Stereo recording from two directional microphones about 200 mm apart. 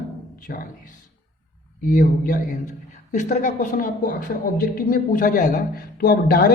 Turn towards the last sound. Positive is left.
turn(degrees=45)  # may be behind; listen again after turning